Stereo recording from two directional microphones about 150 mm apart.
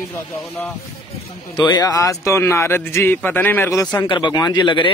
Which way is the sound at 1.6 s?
25° left (ahead or behind).